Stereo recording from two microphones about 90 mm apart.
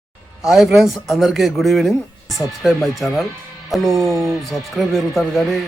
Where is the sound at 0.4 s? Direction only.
5° right (ahead or behind).